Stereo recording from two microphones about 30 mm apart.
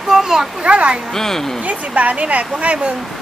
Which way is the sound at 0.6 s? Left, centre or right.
Right.